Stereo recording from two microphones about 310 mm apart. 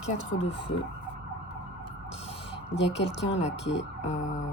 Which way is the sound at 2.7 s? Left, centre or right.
Left.